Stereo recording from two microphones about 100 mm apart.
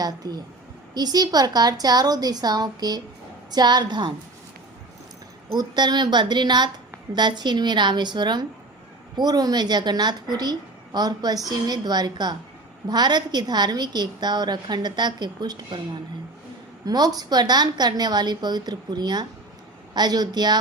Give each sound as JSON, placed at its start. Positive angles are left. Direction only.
{"t": 0.0, "sound": "a woman's voice", "side_deg": -40}
{"t": 5.5, "sound": "a woman's voice", "side_deg": -45}
{"t": 16.8, "sound": "a woman's voice", "side_deg": -40}